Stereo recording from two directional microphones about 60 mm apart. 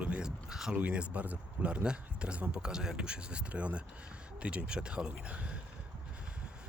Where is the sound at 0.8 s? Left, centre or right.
Right.